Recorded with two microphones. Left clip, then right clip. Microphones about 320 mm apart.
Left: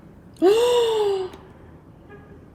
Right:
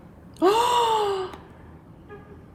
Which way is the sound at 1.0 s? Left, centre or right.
Right.